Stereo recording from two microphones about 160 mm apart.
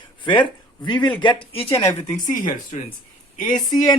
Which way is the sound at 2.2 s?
55° left (ahead or behind).